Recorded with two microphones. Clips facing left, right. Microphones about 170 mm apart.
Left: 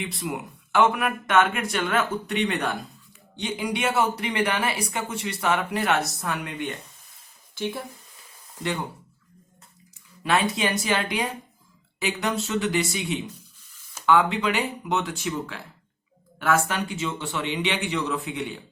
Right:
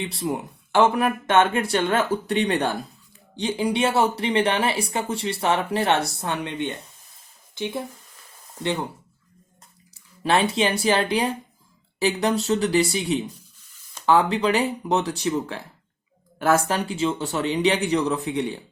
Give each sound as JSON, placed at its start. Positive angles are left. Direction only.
{"t": 0.0, "sound": "speech", "side_deg": -30}
{"t": 10.2, "sound": "speech", "side_deg": -30}